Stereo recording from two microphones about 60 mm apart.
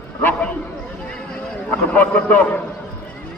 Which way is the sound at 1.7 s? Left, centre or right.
Left.